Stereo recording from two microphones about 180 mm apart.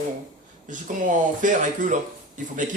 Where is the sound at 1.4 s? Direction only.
45° right (ahead or behind).